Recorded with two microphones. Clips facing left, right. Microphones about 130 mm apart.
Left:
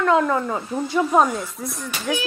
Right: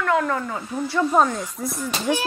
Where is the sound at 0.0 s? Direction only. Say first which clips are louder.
Left 3 dB; 25° left (ahead or behind).